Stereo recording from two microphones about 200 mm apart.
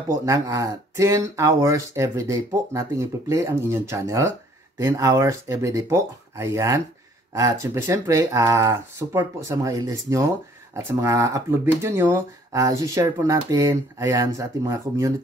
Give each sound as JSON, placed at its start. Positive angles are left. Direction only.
{"t": 0.2, "sound": "speech", "side_deg": -15}